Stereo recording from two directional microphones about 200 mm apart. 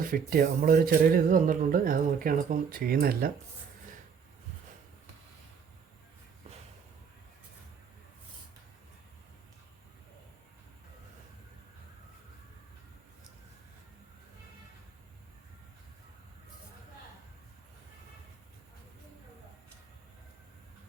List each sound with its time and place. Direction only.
0.1 s speech: 45° right (ahead or behind)